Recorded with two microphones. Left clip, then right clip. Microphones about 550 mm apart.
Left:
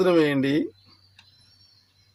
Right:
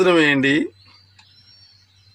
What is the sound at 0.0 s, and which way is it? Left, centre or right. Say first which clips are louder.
Speech: right 5 dB; left.